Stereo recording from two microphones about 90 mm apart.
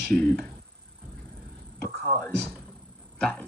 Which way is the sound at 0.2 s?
20° left (ahead or behind).